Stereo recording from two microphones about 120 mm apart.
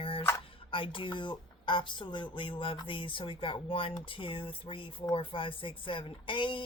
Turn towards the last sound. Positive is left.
turn(degrees=45)  # may be behind; listen again after turning